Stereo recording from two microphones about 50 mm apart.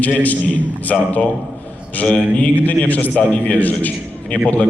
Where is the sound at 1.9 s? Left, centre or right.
Left.